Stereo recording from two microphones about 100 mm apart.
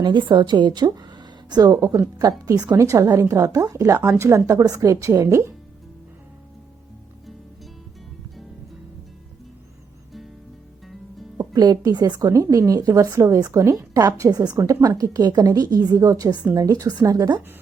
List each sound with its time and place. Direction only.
0.0 s a woman's voice: 50° right (ahead or behind); by 5.5 s 30° right (ahead or behind)
11.3 s a woman's voice: 40° right (ahead or behind)